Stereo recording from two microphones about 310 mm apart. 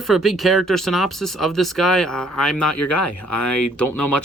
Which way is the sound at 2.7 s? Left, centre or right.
Left.